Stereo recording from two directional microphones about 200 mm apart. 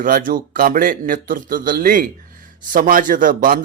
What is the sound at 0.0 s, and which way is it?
A man's voice, 45° right (ahead or behind).